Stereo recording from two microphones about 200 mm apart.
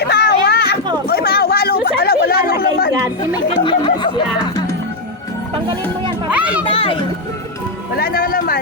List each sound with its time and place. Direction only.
0.0 s a sound: 55° left (ahead or behind)
1.1 s chatter: 50° left (ahead or behind)
3.5 s music: 25° left (ahead or behind)
6.3 s speech: 5° right (ahead or behind)
6.7 s speech: 30° left (ahead or behind)
7.9 s speech: 50° left (ahead or behind)